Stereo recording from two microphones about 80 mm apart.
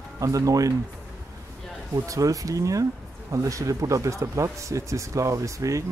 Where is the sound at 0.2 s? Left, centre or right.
Right.